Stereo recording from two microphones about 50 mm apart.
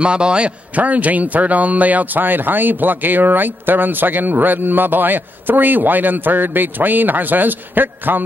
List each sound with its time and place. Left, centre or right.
0.0 s a man's voice: centre
0.7 s a man's voice: right